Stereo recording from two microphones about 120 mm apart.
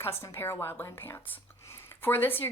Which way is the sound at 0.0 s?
20° left (ahead or behind).